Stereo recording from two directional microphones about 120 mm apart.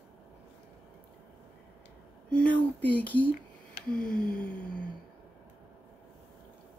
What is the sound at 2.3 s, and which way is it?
Speech, 10° left (ahead or behind).